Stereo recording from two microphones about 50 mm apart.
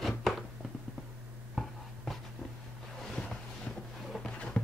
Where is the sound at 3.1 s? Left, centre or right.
Centre.